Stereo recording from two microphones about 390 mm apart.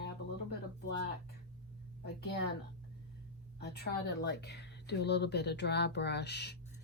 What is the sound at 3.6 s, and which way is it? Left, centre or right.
Speech, left.